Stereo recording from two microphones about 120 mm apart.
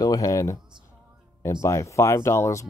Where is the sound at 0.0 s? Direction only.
30° left (ahead or behind).